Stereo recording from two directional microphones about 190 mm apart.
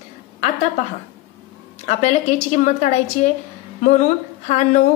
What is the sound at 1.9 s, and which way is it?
Speech, 35° left (ahead or behind).